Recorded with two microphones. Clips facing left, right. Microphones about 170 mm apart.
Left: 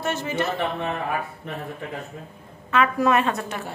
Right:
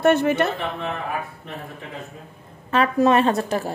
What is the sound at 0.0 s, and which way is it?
Speech, 60° right (ahead or behind).